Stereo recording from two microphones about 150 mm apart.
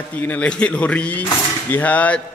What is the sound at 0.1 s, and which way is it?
A man's voice, 10° left (ahead or behind).